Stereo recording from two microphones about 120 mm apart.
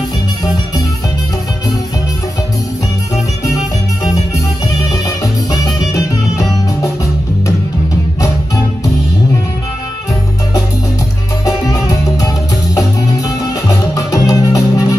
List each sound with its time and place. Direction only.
5.2 s music: 30° left (ahead or behind)
11.4 s music: 30° left (ahead or behind)
13.4 s music: 30° left (ahead or behind)